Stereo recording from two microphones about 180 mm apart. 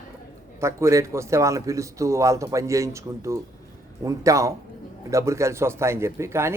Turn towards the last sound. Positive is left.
turn(degrees=-15)  # may be behind; listen again after turning